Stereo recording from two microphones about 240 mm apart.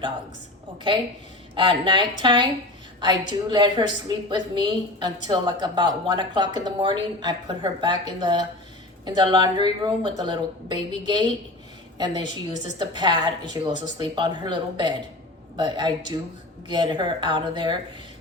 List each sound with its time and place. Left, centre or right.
0.9 s a woman's voice: centre